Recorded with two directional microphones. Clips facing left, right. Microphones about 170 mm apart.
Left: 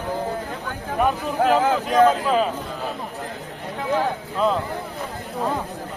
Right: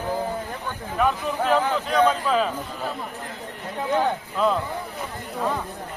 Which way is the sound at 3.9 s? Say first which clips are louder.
Even; centre (ahead or behind).